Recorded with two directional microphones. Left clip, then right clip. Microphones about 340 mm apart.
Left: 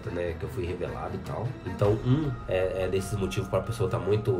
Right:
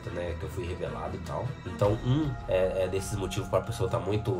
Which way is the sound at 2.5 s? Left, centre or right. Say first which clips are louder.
Even; centre.